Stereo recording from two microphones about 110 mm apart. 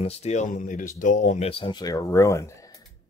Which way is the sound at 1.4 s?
55° left (ahead or behind).